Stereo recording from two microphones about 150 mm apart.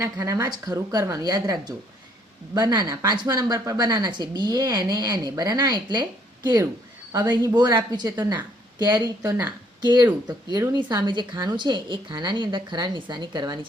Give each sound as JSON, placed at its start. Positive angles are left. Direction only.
{"t": 0.0, "sound": "speech", "side_deg": -20}